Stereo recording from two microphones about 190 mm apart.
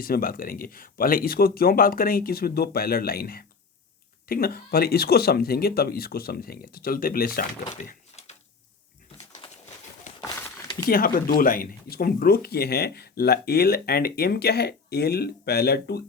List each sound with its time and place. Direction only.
0.0 s speech: 50° left (ahead or behind)
7.8 s door: 40° left (ahead or behind)
10.1 s a sound: 40° left (ahead or behind)
10.8 s speech: 50° left (ahead or behind)